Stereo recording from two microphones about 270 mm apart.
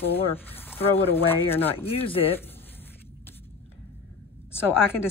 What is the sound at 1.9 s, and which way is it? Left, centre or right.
Speech, left.